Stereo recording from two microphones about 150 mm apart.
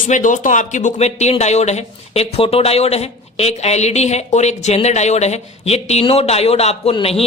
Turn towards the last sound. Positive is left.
turn(degrees=40)  # may be behind; listen again after turning